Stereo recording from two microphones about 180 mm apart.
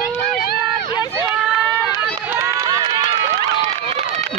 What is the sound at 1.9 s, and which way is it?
Run, 15° right (ahead or behind).